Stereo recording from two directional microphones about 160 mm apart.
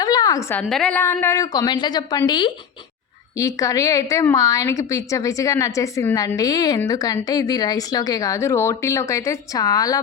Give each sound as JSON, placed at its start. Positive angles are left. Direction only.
{"t": 0.0, "sound": "a sound", "side_deg": 25}
{"t": 0.7, "sound": "a woman's voice", "side_deg": 5}
{"t": 1.0, "sound": "a woman's voice", "side_deg": 15}